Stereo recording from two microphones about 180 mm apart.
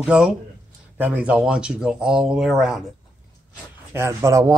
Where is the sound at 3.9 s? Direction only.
15° right (ahead or behind).